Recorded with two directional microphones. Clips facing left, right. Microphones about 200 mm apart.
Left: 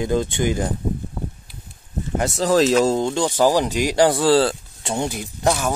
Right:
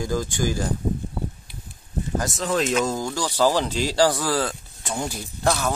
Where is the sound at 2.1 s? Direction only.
30° left (ahead or behind).